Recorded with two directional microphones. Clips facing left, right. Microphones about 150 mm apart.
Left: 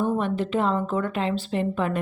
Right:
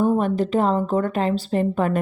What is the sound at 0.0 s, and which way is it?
Speech, 40° right (ahead or behind).